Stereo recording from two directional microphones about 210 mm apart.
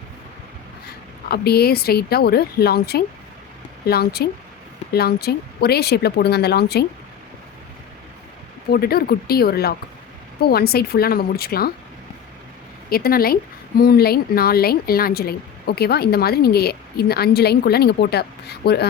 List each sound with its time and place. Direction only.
1.3 s a woman's voice: 50° left (ahead or behind)
8.7 s a woman's voice: 50° left (ahead or behind)
12.9 s a woman's voice: 45° left (ahead or behind)